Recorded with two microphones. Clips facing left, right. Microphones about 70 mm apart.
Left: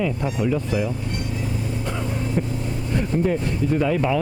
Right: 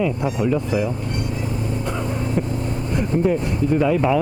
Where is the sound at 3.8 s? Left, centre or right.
Centre.